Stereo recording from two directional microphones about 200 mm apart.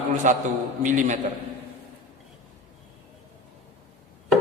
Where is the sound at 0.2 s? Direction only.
40° right (ahead or behind).